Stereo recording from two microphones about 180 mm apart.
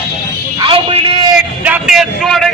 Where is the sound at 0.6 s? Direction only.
30° right (ahead or behind).